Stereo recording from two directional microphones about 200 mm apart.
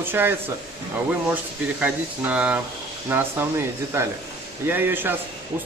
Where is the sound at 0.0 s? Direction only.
10° right (ahead or behind).